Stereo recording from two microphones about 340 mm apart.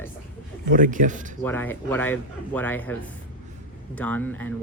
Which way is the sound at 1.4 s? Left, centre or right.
Centre.